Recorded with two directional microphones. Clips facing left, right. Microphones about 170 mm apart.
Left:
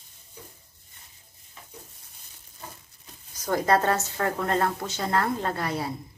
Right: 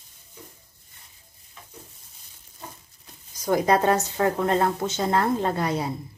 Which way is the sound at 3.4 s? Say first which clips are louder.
Right 2 dB; 15° right (ahead or behind).